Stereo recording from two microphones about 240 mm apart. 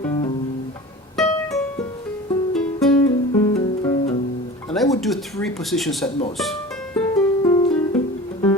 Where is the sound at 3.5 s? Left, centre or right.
Left.